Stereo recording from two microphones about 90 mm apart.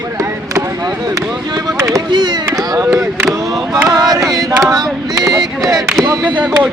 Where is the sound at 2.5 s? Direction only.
40° right (ahead or behind).